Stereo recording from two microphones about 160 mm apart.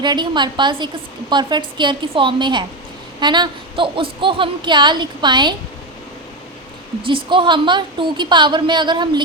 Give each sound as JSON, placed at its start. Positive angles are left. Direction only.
{"t": 0.0, "sound": "speech", "side_deg": -30}
{"t": 7.3, "sound": "speech", "side_deg": -30}